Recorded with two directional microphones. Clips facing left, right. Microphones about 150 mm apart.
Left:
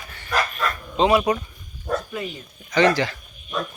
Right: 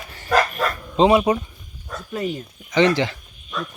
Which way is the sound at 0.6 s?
35° right (ahead or behind).